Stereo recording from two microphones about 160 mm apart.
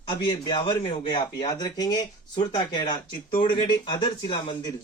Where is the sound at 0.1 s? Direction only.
30° left (ahead or behind).